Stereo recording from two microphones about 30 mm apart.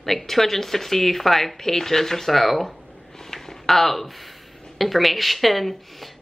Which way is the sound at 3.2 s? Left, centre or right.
Centre.